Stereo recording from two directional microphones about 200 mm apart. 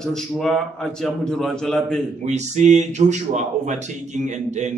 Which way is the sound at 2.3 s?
35° right (ahead or behind).